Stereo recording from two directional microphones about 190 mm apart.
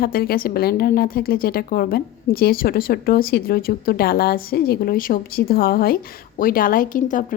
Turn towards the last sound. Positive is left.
turn(degrees=45)  # may be behind; listen again after turning